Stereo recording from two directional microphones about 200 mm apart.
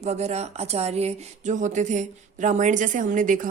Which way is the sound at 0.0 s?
35° right (ahead or behind).